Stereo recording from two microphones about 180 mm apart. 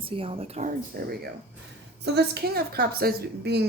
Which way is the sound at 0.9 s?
60° right (ahead or behind).